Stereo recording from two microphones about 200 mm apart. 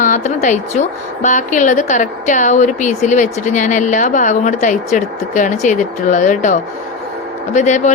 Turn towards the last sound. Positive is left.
turn(degrees=35)  # may be behind; listen again after turning